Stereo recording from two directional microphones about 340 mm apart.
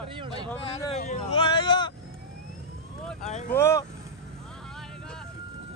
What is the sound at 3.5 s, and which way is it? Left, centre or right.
Speech, centre.